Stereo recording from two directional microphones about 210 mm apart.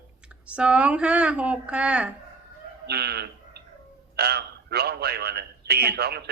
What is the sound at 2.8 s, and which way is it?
A man's voice, 50° right (ahead or behind).